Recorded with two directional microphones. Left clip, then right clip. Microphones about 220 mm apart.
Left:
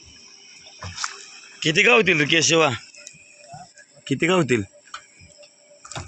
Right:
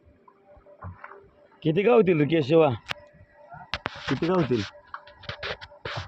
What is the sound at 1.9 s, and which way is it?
Speech, 25° right (ahead or behind).